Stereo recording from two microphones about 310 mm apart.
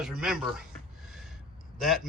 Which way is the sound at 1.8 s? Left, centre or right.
Centre.